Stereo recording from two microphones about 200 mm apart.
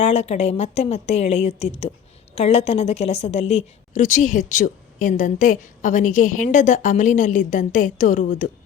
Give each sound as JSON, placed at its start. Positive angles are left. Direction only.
{"t": 0.0, "sound": "a woman's voice", "side_deg": 30}